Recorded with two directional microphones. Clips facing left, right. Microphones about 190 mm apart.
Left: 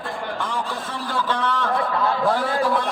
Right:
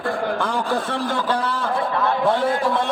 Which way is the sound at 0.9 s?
30° right (ahead or behind).